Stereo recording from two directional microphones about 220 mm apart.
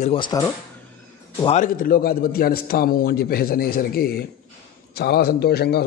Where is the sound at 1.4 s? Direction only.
35° left (ahead or behind).